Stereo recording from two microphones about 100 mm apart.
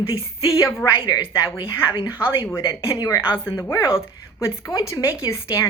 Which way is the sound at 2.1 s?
25° left (ahead or behind).